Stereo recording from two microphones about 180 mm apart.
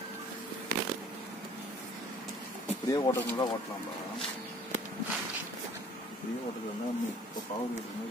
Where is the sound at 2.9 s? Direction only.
25° left (ahead or behind).